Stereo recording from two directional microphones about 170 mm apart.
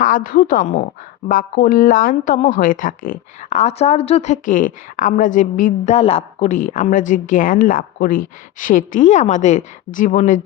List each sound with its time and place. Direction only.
0.0 s speech: 55° left (ahead or behind)